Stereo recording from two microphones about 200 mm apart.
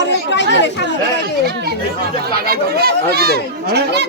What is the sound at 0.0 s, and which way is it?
Chatter, 60° left (ahead or behind).